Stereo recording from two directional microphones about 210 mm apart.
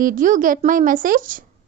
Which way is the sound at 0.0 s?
40° right (ahead or behind).